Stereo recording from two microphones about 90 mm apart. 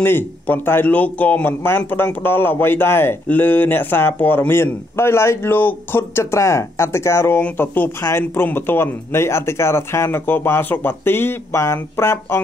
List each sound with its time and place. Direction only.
0.0 s speech: 25° left (ahead or behind)